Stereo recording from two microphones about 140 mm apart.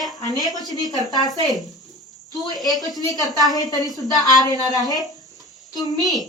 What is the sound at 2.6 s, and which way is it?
Speech, centre (ahead or behind).